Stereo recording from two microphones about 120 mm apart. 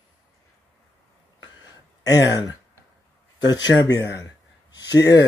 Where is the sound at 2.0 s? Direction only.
30° left (ahead or behind).